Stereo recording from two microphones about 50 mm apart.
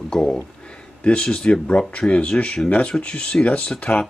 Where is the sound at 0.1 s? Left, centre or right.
Centre.